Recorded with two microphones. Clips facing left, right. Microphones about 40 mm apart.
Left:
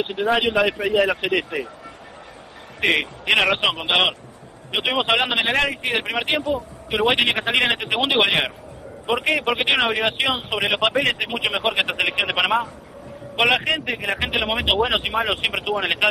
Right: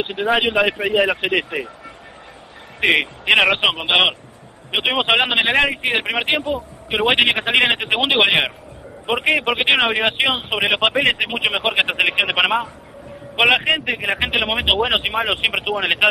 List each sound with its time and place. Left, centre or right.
0.0 s speech: right
0.3 s a man's voice: centre
2.8 s a man's voice: centre
6.4 s a man's voice: right
7.1 s a man's voice: centre
8.0 s a man's voice: centre
8.3 s a man's voice: centre
14.3 s a man's voice: centre
15.7 s speech: centre